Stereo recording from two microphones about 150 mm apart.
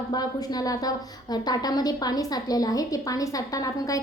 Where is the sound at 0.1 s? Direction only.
25° left (ahead or behind).